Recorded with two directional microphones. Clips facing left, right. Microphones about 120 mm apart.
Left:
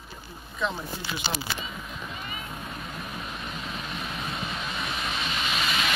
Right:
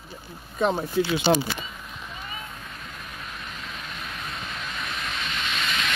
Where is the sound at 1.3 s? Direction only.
90° right.